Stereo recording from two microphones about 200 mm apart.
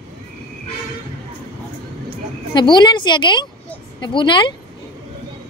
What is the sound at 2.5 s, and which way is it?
Speech, 20° left (ahead or behind).